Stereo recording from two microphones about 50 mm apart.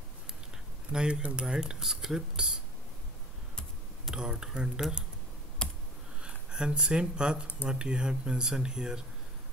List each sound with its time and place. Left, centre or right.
0.9 s speech: centre
4.1 s speech: centre
5.6 s computer keyboard: centre
6.2 s speech: centre